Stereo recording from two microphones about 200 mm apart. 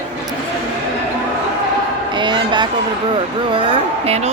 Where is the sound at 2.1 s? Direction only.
25° right (ahead or behind).